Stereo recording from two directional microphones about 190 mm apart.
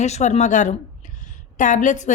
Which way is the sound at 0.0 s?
35° left (ahead or behind).